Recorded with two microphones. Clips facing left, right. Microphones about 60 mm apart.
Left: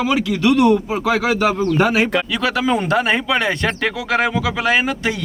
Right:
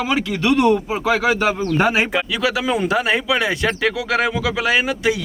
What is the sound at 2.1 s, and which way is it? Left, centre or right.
Speech, centre.